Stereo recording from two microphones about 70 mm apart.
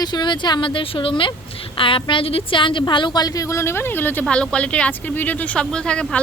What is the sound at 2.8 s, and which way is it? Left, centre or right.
A woman's voice, left.